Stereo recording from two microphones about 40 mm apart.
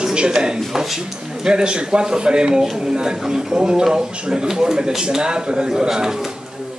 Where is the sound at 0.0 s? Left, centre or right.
Centre.